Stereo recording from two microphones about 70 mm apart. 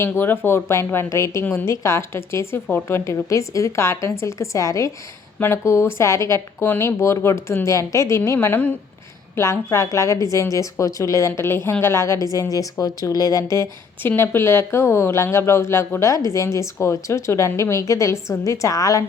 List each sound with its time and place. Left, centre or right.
0.0 s a woman's voice: left
3.0 s a woman's voice: left
8.4 s speech: left
9.3 s a woman's voice: left
14.2 s a woman's voice: left